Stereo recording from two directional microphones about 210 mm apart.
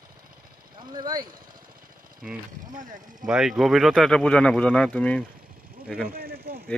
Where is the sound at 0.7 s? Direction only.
20° right (ahead or behind).